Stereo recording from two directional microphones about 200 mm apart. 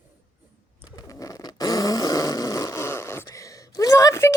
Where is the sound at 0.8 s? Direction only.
20° left (ahead or behind).